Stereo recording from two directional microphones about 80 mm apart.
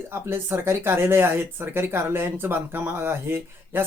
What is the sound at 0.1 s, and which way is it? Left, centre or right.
Speech, right.